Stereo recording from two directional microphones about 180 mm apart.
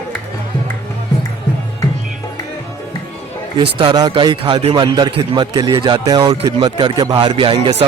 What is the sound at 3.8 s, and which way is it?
A man's voice, 25° right (ahead or behind).